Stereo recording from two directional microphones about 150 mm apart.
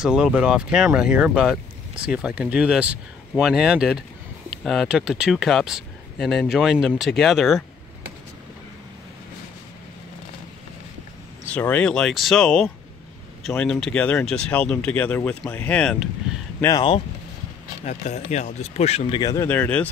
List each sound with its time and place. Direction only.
0.0 s speech: 5° right (ahead or behind)
11.4 s speech: 10° left (ahead or behind)
16.3 s a sound: 5° right (ahead or behind)
16.6 s speech: 25° left (ahead or behind)
17.8 s speech: 45° left (ahead or behind)
19.2 s speech: 15° left (ahead or behind)